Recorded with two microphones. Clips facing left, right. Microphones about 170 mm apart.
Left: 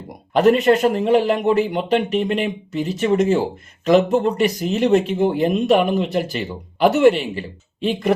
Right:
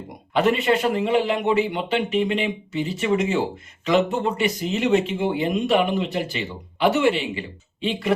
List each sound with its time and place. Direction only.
0.3 s a man's voice: 40° left (ahead or behind)